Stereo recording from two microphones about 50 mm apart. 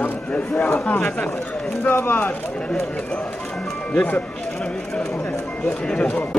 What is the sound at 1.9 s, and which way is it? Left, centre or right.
Speech, left.